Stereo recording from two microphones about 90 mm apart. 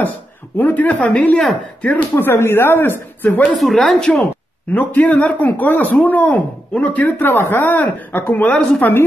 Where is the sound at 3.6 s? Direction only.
Centre (ahead or behind).